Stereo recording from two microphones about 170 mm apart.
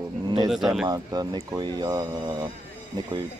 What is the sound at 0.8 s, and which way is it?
Speech, 20° right (ahead or behind).